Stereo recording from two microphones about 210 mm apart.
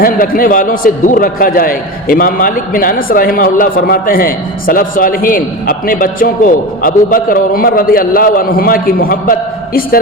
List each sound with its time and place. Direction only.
0.0 s a man's voice: 40° left (ahead or behind)